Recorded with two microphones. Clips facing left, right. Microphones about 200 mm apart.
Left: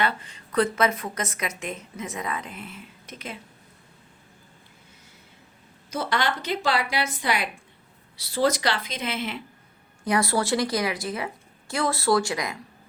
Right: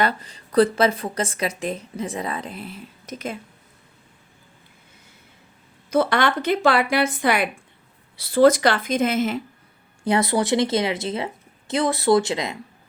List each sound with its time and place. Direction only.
0.0 s a woman's voice: 35° right (ahead or behind)
5.9 s a woman's voice: 55° right (ahead or behind)
10.0 s speech: 25° right (ahead or behind)